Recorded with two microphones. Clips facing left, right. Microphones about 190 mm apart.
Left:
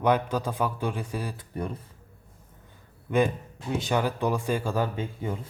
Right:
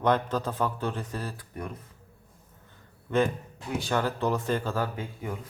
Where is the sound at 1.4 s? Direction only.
30° left (ahead or behind).